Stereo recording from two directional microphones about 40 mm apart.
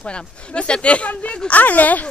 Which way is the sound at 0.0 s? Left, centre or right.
Left.